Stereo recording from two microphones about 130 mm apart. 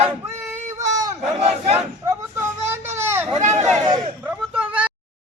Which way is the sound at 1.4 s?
55° right (ahead or behind).